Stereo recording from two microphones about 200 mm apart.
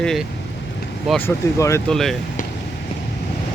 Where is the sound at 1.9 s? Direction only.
Centre (ahead or behind).